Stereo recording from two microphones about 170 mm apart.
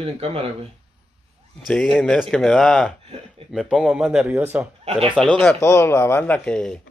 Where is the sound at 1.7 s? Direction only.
Centre (ahead or behind).